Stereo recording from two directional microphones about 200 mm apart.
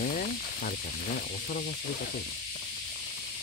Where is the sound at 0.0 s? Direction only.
45° left (ahead or behind).